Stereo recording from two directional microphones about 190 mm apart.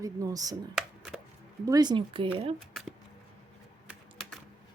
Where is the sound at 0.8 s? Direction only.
5° right (ahead or behind).